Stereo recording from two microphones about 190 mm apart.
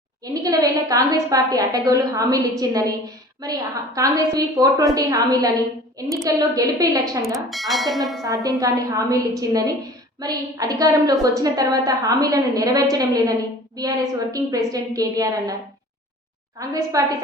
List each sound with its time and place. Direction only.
0.4 s a woman's voice: 20° right (ahead or behind)
7.3 s speech: centre (ahead or behind)
8.4 s a woman's voice: 15° right (ahead or behind)
16.6 s a woman's voice: 15° right (ahead or behind)